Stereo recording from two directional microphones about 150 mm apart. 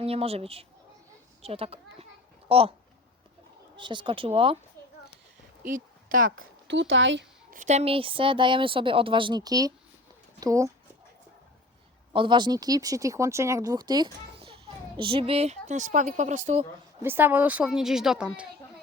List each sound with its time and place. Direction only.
0.0 s a child's voice: 40° right (ahead or behind)
3.8 s speech: 30° right (ahead or behind)
5.6 s a woman's voice: 65° right (ahead or behind)
7.5 s speech: 55° right (ahead or behind); by 10.7 s 20° right (ahead or behind)
12.1 s speech: 35° right (ahead or behind); by 16.6 s 50° right (ahead or behind)
17.0 s a woman's voice: 15° right (ahead or behind)